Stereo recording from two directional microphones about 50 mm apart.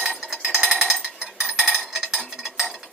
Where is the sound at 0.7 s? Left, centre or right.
Centre.